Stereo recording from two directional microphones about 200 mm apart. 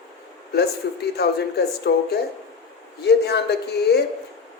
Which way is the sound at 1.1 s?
55° left (ahead or behind).